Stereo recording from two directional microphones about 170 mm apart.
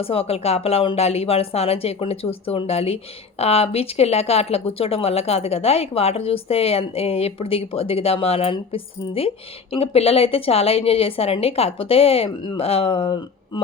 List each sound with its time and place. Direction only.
0.0 s speech: 35° left (ahead or behind)